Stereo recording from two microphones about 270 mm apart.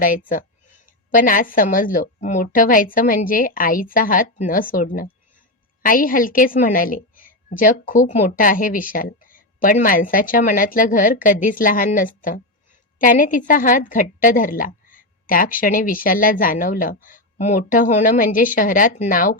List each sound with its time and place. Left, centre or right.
1.1 s a woman's voice: left